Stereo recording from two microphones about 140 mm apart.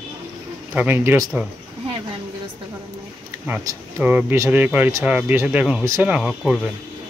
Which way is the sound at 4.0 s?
15° right (ahead or behind).